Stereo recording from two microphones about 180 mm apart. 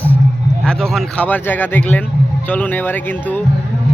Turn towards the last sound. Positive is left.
turn(degrees=10)  # may be behind; listen again after turning